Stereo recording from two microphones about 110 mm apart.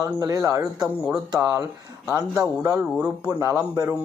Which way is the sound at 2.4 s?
30° right (ahead or behind).